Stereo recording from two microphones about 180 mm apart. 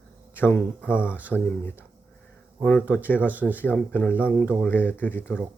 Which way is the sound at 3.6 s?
10° left (ahead or behind).